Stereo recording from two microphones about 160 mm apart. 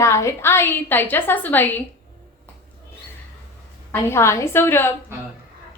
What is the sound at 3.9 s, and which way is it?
A woman's voice, 15° left (ahead or behind).